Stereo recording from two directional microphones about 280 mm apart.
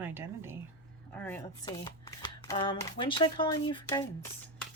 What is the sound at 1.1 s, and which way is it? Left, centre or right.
Speech, centre.